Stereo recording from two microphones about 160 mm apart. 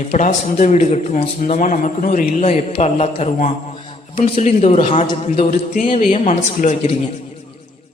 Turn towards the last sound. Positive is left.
turn(degrees=45)  # may be behind; listen again after turning